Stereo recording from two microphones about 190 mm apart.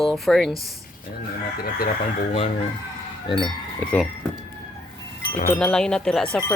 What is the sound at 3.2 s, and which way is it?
Speech, 25° left (ahead or behind).